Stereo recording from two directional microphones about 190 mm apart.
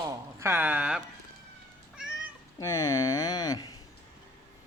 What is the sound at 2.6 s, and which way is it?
Speech, 15° left (ahead or behind).